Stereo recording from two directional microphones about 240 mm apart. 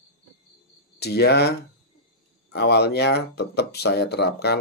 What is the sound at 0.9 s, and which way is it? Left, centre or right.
Speech, left.